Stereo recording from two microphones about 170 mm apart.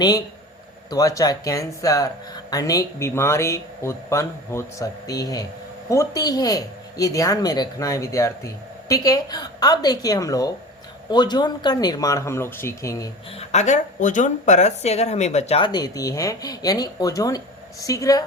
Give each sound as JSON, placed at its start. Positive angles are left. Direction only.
{"t": 0.9, "sound": "speech", "side_deg": 20}
{"t": 13.3, "sound": "speech", "side_deg": 40}